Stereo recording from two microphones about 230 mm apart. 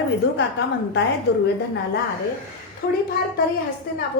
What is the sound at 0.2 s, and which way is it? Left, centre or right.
Speech, left.